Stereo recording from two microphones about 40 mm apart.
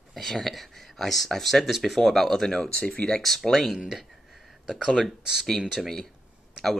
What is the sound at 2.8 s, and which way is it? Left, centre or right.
Speech, left.